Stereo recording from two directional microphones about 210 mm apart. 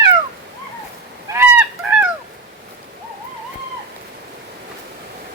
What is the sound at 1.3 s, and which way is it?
Goose, 10° right (ahead or behind).